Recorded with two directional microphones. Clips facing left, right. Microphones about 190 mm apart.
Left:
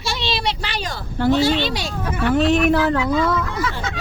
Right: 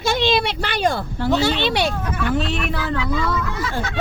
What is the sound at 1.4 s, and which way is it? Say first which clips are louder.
Speech: even; 65° right (ahead or behind).